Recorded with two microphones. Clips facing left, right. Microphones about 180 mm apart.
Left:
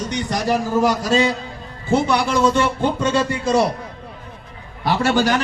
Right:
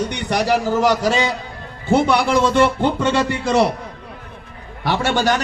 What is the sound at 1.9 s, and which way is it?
A man's voice, 60° right (ahead or behind).